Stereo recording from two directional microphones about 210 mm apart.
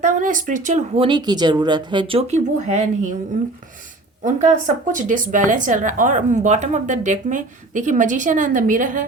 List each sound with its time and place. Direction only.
0.0 s speech: 40° right (ahead or behind)
4.2 s speech: 35° right (ahead or behind)